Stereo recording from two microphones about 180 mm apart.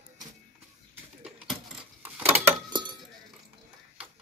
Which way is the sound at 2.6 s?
25° right (ahead or behind).